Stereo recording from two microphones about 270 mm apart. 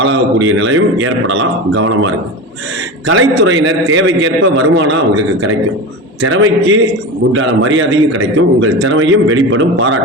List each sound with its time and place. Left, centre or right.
0.0 s a man's voice: right
6.2 s a man's voice: right